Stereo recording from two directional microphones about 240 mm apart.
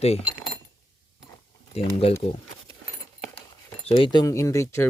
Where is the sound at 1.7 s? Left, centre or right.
Left.